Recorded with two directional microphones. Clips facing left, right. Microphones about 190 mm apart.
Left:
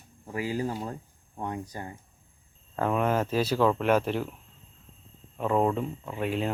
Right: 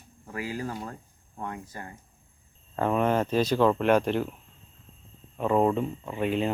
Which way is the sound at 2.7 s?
Centre (ahead or behind).